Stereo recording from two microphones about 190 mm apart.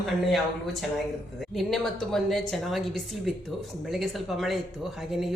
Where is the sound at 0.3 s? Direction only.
Centre (ahead or behind).